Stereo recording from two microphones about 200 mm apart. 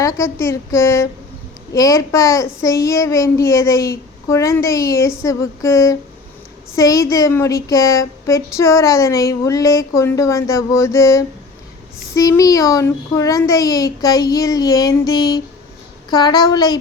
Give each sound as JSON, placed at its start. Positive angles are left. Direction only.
{"t": 0.0, "sound": "a woman's voice", "side_deg": 15}